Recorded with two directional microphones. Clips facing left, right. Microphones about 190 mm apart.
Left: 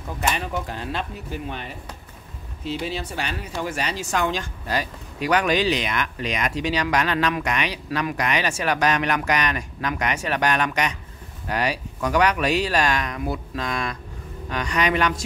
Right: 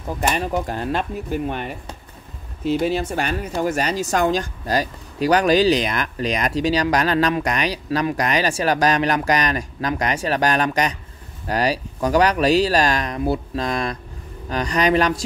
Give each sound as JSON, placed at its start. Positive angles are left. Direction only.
{"t": 0.3, "sound": "speech", "side_deg": -40}